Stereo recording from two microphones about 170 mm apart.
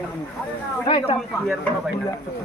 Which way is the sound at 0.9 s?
30° left (ahead or behind).